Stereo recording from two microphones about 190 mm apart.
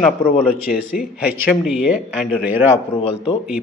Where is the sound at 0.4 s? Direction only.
Centre (ahead or behind).